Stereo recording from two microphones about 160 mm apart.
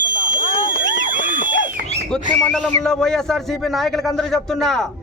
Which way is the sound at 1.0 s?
55° right (ahead or behind).